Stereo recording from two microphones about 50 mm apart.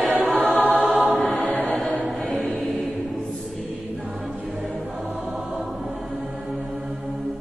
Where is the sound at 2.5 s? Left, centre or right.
Centre.